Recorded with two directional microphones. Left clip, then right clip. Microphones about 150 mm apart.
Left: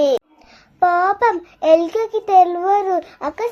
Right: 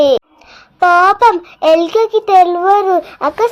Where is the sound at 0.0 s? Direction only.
30° right (ahead or behind).